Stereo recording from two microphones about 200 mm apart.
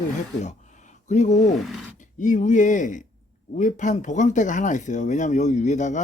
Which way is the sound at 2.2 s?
40° left (ahead or behind).